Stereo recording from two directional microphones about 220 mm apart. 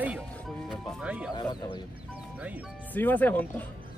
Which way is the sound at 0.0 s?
5° right (ahead or behind).